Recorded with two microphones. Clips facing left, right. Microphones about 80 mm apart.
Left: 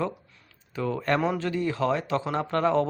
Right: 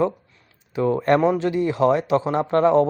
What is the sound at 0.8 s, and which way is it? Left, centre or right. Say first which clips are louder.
Speech: right 8 dB; right.